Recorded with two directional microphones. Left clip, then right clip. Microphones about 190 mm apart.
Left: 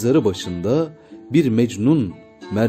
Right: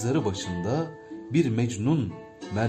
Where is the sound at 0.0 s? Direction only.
45° left (ahead or behind).